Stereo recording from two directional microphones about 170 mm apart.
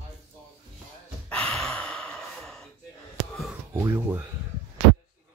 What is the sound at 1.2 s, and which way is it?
Gasp, 5° left (ahead or behind).